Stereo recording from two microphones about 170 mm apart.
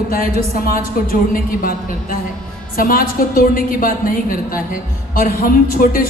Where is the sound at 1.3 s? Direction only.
55° left (ahead or behind).